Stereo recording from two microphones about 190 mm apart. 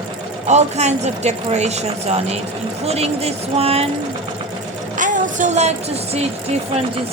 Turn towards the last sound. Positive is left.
turn(degrees=-35)  # may be behind; listen again after turning